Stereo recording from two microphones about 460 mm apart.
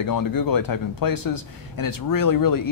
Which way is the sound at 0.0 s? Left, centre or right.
Left.